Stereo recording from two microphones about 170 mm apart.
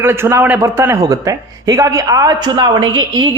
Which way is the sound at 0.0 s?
15° right (ahead or behind).